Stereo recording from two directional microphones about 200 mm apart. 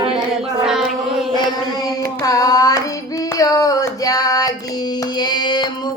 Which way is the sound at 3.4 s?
15° left (ahead or behind).